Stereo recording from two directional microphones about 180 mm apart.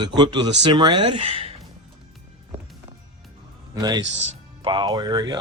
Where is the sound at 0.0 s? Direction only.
25° right (ahead or behind).